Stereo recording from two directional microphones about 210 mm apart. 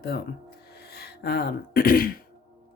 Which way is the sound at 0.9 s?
50° left (ahead or behind).